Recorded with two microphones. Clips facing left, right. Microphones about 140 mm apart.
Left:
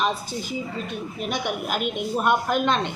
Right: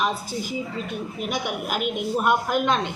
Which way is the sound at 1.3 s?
10° right (ahead or behind).